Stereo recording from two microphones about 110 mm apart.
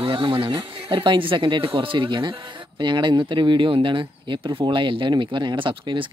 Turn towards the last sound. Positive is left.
turn(degrees=-50)  # may be behind; listen again after turning